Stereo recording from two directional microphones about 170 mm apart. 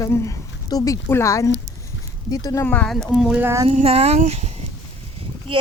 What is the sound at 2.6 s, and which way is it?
Speech, 10° left (ahead or behind).